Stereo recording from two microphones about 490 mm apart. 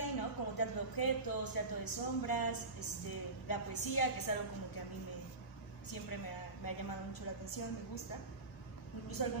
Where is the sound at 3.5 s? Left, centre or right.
Left.